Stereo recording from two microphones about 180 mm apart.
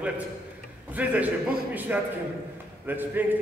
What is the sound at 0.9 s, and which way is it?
A man's voice, 10° right (ahead or behind).